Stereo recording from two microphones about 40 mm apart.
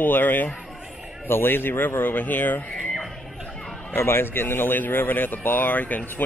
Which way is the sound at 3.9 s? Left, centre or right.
Left.